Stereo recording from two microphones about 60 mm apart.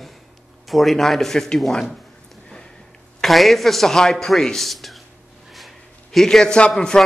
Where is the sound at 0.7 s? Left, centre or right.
Centre.